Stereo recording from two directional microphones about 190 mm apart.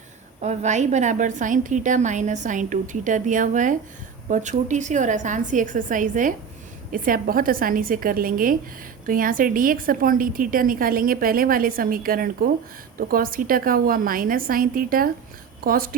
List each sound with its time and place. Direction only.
0.4 s a woman's voice: 40° right (ahead or behind)